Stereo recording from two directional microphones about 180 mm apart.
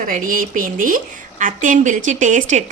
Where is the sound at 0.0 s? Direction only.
50° right (ahead or behind).